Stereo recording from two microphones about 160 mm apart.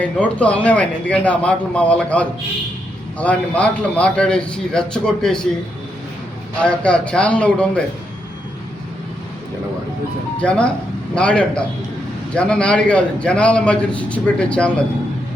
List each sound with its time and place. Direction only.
0.0 s a man's voice: 10° left (ahead or behind)
6.6 s a man's voice: 5° left (ahead or behind)
10.4 s a man's voice: 5° left (ahead or behind)